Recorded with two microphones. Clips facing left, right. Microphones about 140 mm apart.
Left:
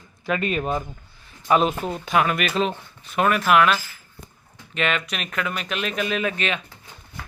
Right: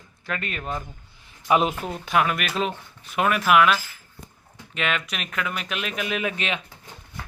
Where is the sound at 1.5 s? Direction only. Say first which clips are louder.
Left 2 dB; 10° right (ahead or behind).